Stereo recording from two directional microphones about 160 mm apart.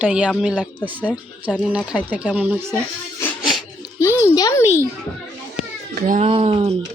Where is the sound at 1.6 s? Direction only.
5° right (ahead or behind).